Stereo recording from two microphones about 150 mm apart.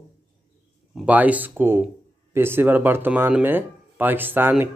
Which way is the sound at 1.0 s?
10° right (ahead or behind).